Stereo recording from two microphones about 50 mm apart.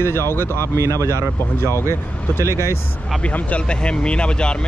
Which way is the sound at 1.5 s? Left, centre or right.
Left.